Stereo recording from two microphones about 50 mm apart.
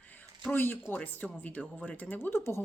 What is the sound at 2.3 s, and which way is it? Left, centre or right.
Speech, left.